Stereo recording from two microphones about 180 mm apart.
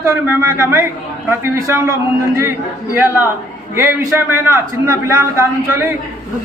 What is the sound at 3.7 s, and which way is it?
A man's voice, 15° right (ahead or behind).